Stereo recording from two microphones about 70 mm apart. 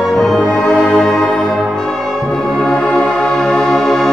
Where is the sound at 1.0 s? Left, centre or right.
Centre.